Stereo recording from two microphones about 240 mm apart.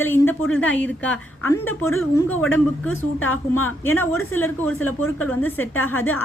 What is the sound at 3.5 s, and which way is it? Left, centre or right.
Speech, left.